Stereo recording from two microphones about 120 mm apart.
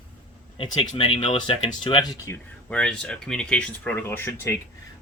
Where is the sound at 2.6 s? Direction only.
10° left (ahead or behind).